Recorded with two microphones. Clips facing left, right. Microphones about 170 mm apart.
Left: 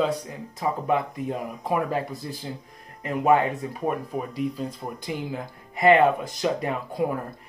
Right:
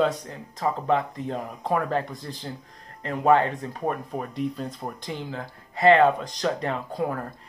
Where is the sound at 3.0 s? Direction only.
15° left (ahead or behind).